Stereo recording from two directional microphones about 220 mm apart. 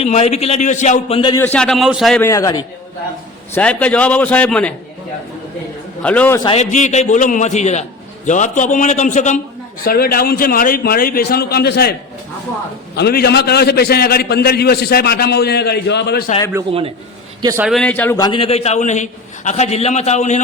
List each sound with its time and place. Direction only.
0.0 s a man's voice: 30° left (ahead or behind)
1.4 s a man's voice: 5° left (ahead or behind)
2.2 s a man's voice: 15° left (ahead or behind)
6.0 s a man's voice: 5° left (ahead or behind)
6.4 s a man's voice: 30° left (ahead or behind); by 11.9 s 45° left (ahead or behind)
13.0 s a man's voice: 45° left (ahead or behind)
17.4 s a man's voice: 10° right (ahead or behind)
17.7 s a man's voice: 5° left (ahead or behind)
18.3 s a man's voice: 25° left (ahead or behind)